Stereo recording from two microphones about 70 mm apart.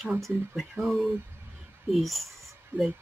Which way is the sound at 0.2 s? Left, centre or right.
Centre.